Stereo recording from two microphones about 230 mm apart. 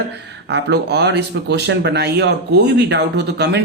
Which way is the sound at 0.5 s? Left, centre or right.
Right.